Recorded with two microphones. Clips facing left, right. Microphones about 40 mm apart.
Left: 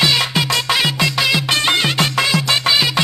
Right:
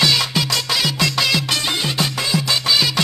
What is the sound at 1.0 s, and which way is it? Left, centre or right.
Music, centre.